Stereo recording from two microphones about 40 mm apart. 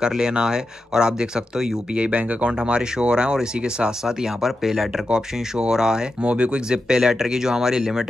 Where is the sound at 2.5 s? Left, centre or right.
Right.